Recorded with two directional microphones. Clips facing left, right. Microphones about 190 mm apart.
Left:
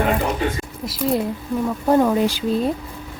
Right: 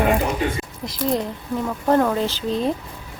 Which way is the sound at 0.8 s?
5° left (ahead or behind).